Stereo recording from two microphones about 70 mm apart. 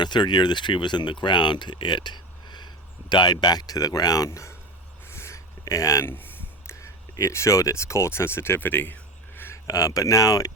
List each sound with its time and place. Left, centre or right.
0.0 s speech: left
4.3 s speech: left
5.0 s a sound: left
6.1 s a sound: left
6.7 s speech: left
9.6 s speech: left